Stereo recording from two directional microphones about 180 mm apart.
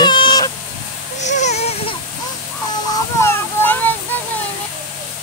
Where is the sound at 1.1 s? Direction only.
40° left (ahead or behind).